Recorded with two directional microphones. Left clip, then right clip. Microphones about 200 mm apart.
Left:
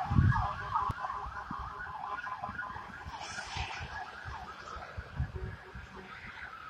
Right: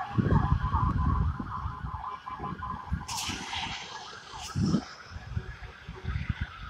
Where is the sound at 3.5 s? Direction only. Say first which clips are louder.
Right 5 dB; 5° left (ahead or behind).